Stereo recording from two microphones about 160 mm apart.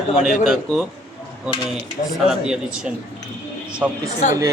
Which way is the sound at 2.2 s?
5° right (ahead or behind).